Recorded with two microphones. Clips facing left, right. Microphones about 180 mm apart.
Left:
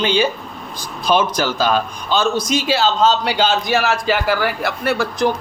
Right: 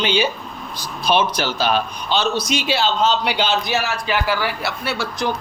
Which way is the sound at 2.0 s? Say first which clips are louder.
Left 3 dB; 45° left (ahead or behind).